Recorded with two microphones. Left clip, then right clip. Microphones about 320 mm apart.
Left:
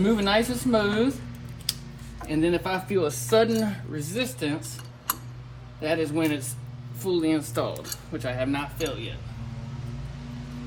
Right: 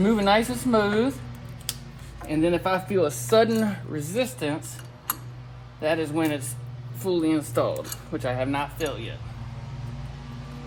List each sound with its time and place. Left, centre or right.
0.0 s a woman's voice: centre
2.2 s speech: centre
3.4 s a woman's voice: centre
5.8 s a woman's voice: centre
6.1 s a man's voice: centre
7.0 s a woman's voice: centre